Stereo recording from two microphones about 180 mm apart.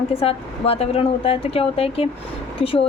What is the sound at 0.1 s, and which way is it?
A woman's voice, 30° left (ahead or behind).